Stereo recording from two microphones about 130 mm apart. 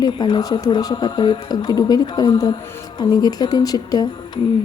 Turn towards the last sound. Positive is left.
turn(degrees=30)  # may be behind; listen again after turning